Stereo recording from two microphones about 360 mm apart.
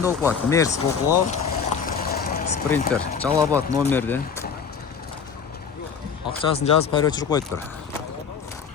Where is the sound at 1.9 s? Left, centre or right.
Left.